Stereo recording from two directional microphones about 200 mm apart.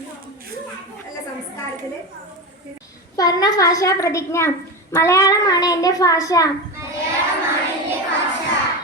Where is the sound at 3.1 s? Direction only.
20° left (ahead or behind).